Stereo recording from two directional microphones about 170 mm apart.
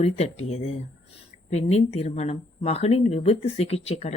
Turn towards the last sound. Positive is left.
turn(degrees=35)  # may be behind; listen again after turning